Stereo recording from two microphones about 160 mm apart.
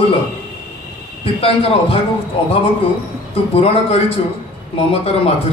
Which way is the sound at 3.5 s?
40° left (ahead or behind).